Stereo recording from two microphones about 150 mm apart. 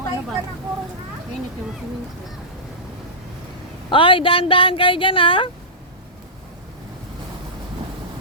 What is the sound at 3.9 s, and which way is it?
Speech, 35° left (ahead or behind).